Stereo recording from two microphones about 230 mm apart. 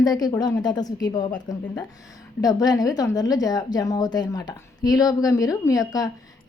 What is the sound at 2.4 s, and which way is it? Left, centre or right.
A woman's voice, centre.